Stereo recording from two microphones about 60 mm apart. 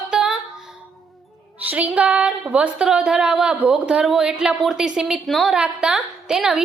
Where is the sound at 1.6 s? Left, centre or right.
Right; by 5.2 s centre.